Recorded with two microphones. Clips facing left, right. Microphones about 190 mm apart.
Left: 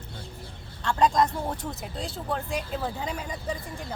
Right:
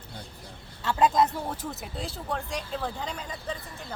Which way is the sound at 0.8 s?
5° right (ahead or behind).